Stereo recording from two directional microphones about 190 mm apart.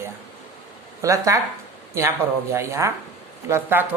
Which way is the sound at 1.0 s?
15° right (ahead or behind).